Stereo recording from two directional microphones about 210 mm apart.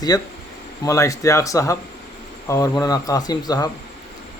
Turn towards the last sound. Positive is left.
turn(degrees=20)  # may be behind; listen again after turning